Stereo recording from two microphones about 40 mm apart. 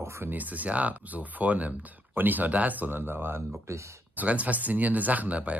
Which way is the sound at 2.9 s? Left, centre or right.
Right.